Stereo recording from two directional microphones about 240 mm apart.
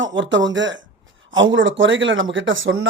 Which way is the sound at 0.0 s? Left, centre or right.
Right.